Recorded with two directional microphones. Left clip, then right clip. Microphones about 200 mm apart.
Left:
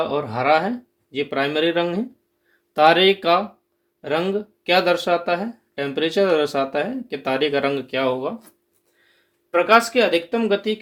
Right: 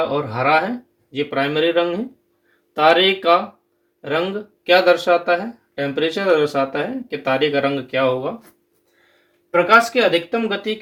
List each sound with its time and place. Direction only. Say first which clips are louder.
0.1 s speech: right 1 dB; 45° left (ahead or behind)
9.5 s speech: right 2 dB; 40° left (ahead or behind)